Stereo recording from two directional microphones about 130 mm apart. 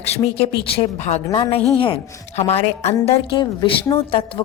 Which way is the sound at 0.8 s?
60° left (ahead or behind).